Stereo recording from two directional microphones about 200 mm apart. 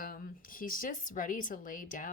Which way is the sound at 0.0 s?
45° left (ahead or behind).